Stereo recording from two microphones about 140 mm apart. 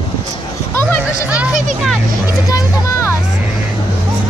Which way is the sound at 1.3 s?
10° right (ahead or behind).